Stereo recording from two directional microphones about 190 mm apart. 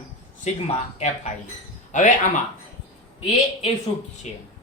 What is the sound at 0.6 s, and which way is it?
Speech, 35° left (ahead or behind).